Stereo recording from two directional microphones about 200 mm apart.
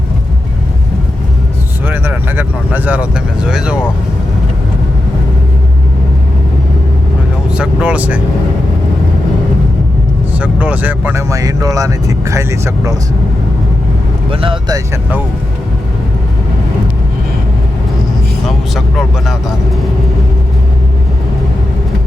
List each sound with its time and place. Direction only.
1.9 s vehicle: 10° right (ahead or behind)
7.5 s vehicle: 5° right (ahead or behind)
10.3 s speech: 5° right (ahead or behind)
14.3 s speech: 25° right (ahead or behind)
18.4 s speech: centre (ahead or behind)